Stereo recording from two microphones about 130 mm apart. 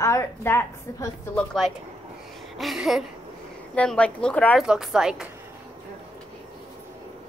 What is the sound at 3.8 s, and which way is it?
Speech, 10° left (ahead or behind).